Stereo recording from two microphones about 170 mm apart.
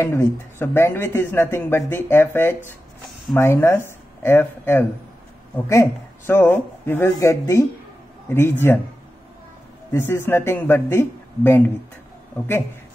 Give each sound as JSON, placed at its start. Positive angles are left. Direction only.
{"t": 0.0, "sound": "speech", "side_deg": 15}
{"t": 9.9, "sound": "speech", "side_deg": 15}